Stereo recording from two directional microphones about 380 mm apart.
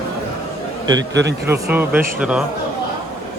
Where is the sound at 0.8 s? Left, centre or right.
Right.